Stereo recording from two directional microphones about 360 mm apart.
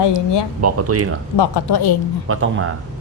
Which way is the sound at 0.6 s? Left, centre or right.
Right.